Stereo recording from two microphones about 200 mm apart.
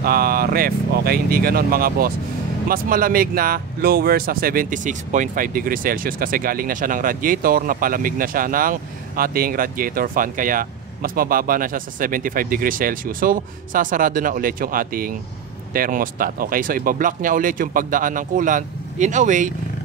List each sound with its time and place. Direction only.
0.0 s speech: 50° right (ahead or behind)